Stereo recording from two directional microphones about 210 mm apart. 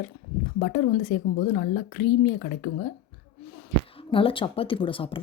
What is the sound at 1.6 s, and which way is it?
Speech, 45° left (ahead or behind).